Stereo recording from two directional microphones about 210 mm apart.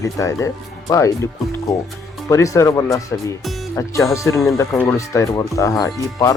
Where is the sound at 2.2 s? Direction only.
15° left (ahead or behind).